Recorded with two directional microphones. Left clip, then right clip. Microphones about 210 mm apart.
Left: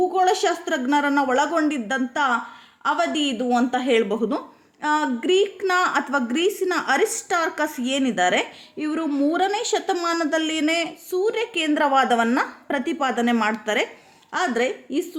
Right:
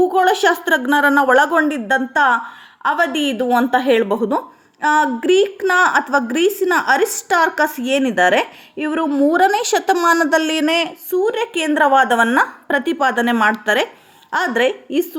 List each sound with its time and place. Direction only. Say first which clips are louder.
0.1 s a woman's voice: right 6 dB; 20° right (ahead or behind)